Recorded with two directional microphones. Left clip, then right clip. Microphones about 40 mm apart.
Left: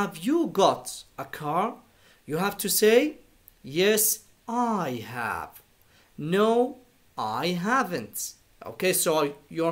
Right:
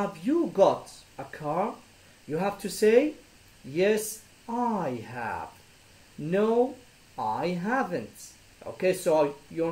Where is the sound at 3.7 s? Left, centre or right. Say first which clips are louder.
Left 2 dB; left.